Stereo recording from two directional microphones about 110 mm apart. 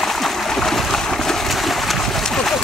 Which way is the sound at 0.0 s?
Centre (ahead or behind).